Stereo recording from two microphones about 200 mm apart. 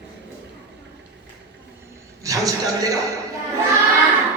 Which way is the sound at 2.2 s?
15° right (ahead or behind).